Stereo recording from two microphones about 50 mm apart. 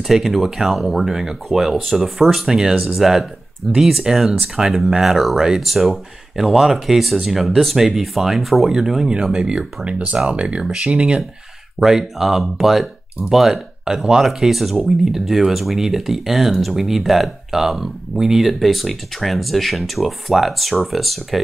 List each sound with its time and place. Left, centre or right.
0.0 s speech: centre
11.8 s speech: centre